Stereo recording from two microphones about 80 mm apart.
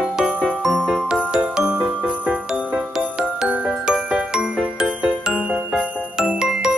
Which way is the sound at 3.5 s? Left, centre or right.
Centre.